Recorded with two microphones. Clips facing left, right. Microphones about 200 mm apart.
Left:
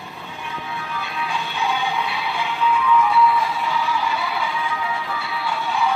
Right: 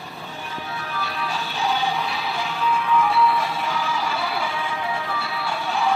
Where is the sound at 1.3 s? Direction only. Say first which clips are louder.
Even; 35° right (ahead or behind).